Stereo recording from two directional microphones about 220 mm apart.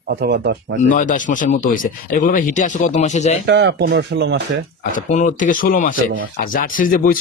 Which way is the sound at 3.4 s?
50° right (ahead or behind).